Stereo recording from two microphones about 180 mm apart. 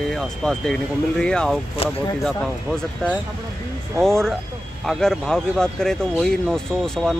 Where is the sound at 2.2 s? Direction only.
5° left (ahead or behind).